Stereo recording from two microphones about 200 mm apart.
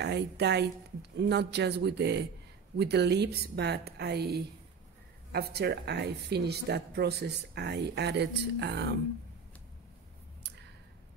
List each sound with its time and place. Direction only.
0.0 s speech: 60° right (ahead or behind)